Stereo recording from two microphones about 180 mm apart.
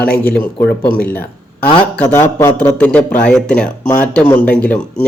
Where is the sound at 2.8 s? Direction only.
5° left (ahead or behind).